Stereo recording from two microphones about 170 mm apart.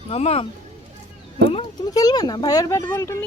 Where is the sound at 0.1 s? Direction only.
35° left (ahead or behind).